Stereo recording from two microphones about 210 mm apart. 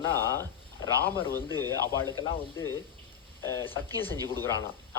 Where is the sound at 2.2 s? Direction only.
25° left (ahead or behind).